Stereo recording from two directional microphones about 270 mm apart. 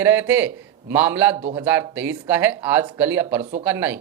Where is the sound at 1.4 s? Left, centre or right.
Right.